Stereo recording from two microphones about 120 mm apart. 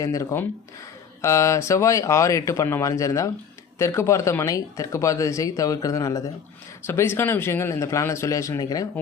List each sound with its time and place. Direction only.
0.0 s speech: 25° left (ahead or behind)